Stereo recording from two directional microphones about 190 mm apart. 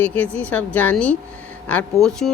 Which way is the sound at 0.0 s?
10° left (ahead or behind).